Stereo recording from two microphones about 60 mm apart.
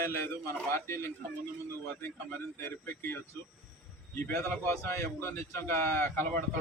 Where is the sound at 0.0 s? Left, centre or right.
Left.